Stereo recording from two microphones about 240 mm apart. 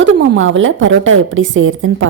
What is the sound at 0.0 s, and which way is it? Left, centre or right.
A woman's voice, right.